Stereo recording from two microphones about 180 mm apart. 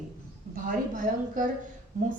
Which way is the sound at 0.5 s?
50° right (ahead or behind).